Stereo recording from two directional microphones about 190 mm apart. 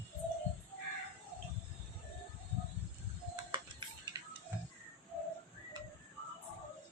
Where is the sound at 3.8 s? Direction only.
25° right (ahead or behind).